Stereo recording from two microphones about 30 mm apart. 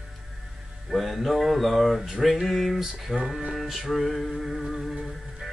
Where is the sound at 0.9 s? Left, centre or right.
Centre.